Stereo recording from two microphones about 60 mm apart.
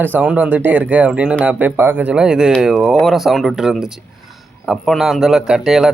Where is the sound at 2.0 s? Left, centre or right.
Centre.